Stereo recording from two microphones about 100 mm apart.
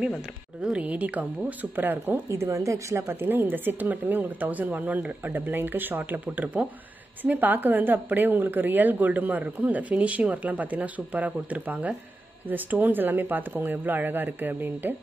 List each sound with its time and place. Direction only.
0.6 s a woman's voice: 10° right (ahead or behind)